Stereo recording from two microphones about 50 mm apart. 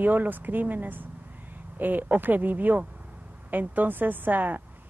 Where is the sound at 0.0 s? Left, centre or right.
Right.